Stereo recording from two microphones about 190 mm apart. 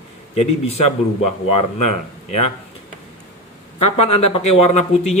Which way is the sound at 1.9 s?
35° left (ahead or behind).